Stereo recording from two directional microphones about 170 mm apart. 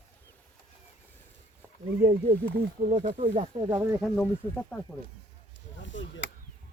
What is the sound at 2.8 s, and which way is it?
Speech, 50° right (ahead or behind).